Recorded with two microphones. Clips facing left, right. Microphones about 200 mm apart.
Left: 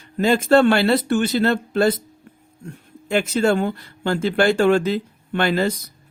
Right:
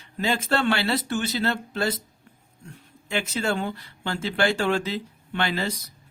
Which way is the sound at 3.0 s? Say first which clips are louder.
Left 8 dB; 50° left (ahead or behind).